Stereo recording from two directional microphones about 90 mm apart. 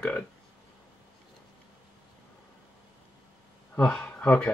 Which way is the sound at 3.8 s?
15° left (ahead or behind).